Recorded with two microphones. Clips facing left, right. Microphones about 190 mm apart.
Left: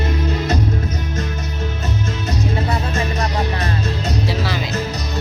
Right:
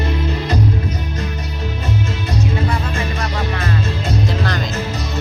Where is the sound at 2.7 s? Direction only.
40° left (ahead or behind).